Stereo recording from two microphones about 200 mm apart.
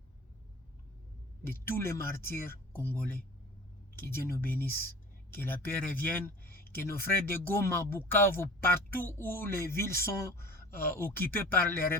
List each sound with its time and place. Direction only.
1.5 s speech: 10° left (ahead or behind)
6.4 s a sound: 45° left (ahead or behind)
6.7 s speech: 10° left (ahead or behind)